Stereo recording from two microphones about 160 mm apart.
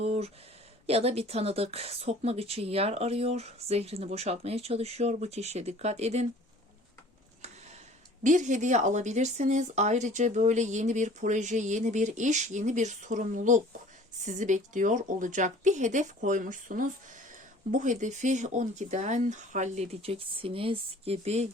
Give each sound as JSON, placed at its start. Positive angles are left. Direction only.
{"t": 0.0, "sound": "speech", "side_deg": -40}
{"t": 8.2, "sound": "speech", "side_deg": -50}